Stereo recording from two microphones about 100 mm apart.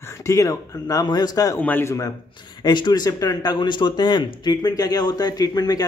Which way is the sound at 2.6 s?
45° left (ahead or behind).